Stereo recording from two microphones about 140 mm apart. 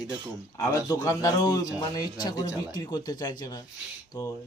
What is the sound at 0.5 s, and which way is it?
A man's voice, 25° left (ahead or behind).